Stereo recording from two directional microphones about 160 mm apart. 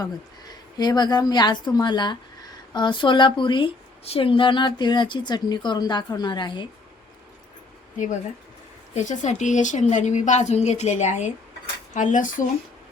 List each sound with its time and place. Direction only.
0.8 s speech: 25° left (ahead or behind)
9.0 s a woman's voice: 45° left (ahead or behind)